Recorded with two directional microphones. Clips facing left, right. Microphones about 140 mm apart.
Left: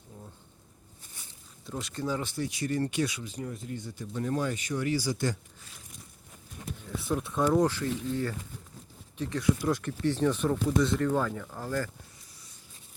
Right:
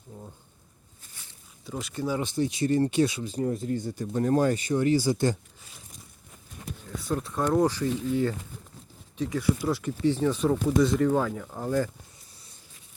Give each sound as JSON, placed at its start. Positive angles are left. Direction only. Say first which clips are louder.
{"t": 1.6, "sound": "speech", "louder": "right 3 dB", "side_deg": -5}
{"t": 4.6, "sound": "speech", "louder": "right 6 dB", "side_deg": -30}
{"t": 7.1, "sound": "speech", "louder": "even", "side_deg": 0}
{"t": 7.6, "sound": "speech", "louder": "right 3 dB", "side_deg": -15}